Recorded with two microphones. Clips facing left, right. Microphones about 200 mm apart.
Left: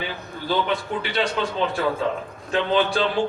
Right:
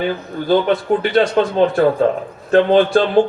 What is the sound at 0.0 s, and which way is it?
A man's voice, 50° right (ahead or behind).